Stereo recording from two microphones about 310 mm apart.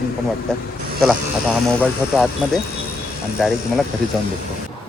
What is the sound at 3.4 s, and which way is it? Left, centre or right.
Speech, centre.